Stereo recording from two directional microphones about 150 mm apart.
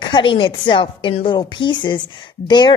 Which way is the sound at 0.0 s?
30° left (ahead or behind).